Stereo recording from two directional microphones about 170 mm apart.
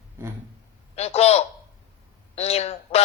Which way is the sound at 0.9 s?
40° left (ahead or behind).